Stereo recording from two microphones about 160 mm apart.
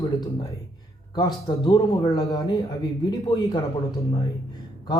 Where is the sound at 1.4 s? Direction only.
25° left (ahead or behind).